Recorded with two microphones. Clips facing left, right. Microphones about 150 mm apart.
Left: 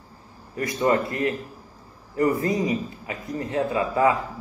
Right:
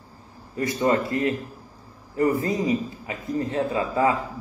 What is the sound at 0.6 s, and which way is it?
A man's voice, 30° right (ahead or behind).